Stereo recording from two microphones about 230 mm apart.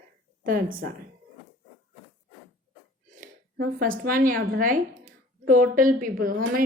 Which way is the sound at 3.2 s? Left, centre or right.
Right.